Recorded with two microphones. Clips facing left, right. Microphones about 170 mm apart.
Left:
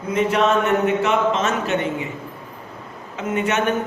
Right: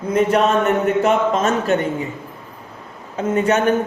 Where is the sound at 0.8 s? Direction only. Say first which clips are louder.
Right 2 dB; 45° right (ahead or behind).